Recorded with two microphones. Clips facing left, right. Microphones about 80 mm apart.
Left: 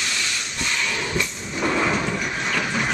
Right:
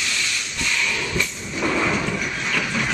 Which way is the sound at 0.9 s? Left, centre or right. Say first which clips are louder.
Even; left.